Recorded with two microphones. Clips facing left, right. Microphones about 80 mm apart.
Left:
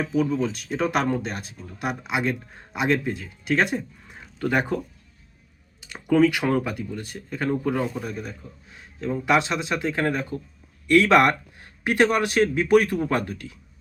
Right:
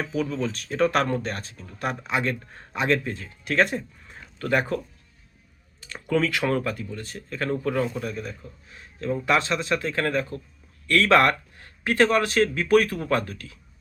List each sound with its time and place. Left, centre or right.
0.0 s speech: centre
3.8 s a sound: left
5.9 s speech: centre